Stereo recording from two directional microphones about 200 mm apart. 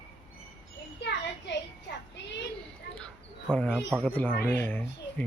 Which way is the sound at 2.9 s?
5° left (ahead or behind).